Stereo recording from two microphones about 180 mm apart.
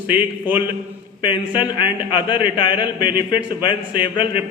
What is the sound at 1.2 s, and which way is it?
A man's voice, 25° left (ahead or behind).